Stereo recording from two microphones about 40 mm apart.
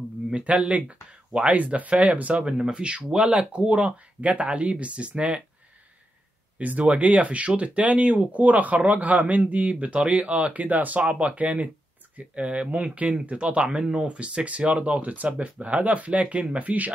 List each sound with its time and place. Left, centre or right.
0.3 s speech: right
2.3 s speech: right
6.6 s speech: right
11.0 s speech: right
13.7 s speech: centre
13.9 s speech: right